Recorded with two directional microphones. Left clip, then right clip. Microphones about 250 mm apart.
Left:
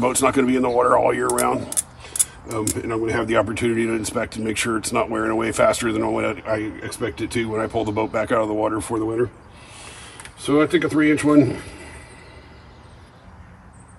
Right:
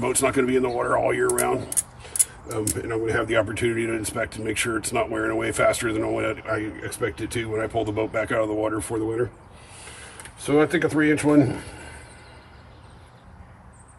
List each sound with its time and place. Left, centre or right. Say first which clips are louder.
0.0 s speech: left 4 dB; centre
10.5 s speech: left 2 dB; centre